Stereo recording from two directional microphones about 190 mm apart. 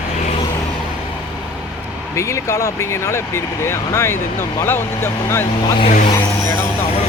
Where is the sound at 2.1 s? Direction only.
15° left (ahead or behind).